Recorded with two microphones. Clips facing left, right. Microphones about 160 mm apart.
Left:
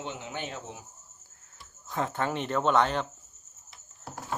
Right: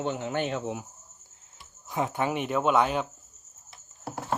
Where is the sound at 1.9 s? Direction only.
20° right (ahead or behind).